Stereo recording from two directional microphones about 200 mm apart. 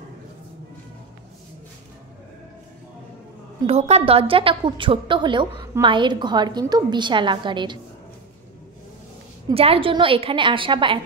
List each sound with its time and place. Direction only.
3.6 s a woman's voice: 30° right (ahead or behind)
9.5 s a woman's voice: 30° right (ahead or behind)